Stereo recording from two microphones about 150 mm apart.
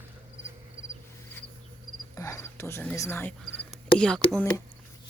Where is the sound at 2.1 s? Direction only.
20° left (ahead or behind).